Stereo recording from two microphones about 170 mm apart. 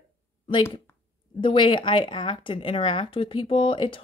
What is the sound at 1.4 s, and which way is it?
Speech, 30° left (ahead or behind).